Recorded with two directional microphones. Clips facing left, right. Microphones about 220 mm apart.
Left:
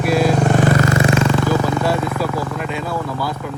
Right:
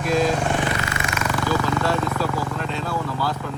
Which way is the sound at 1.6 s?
10° left (ahead or behind).